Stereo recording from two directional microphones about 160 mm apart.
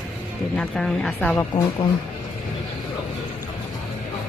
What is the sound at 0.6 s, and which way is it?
Speech, 5° left (ahead or behind).